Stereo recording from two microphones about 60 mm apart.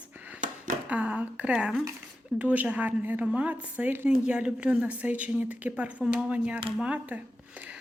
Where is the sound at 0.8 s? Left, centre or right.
Right.